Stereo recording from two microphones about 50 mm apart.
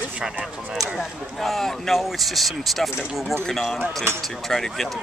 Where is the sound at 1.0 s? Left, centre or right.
Centre.